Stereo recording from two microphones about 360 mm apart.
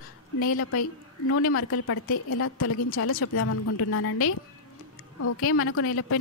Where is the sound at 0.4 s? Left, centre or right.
Left.